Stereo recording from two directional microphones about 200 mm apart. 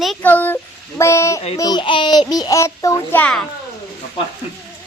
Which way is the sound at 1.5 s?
20° left (ahead or behind).